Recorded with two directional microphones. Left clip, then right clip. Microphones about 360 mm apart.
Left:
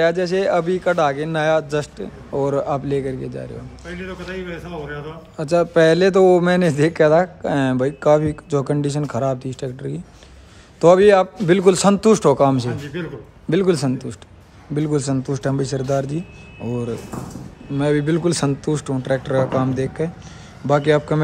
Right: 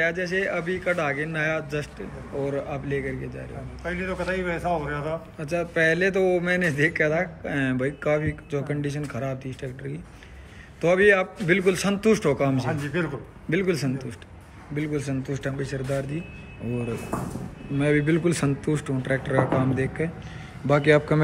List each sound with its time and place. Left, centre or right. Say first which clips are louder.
0.0 s speech: left 7 dB; centre
2.3 s speech: left 8 dB; left
2.7 s speech: left 8 dB; centre
3.8 s speech: right 4 dB; centre
5.6 s speech: left 8 dB; centre
6.5 s speech: left 5 dB; left
7.2 s speech: left 9 dB; centre
12.8 s speech: right 1 dB; centre
13.5 s speech: left 7 dB; centre
15.2 s speech: left 8 dB; left
15.7 s speech: left 8 dB; centre
17.7 s speech: left 4 dB; centre